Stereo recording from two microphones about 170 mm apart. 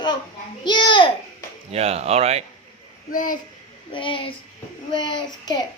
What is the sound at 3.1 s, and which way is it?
Speech, 55° left (ahead or behind).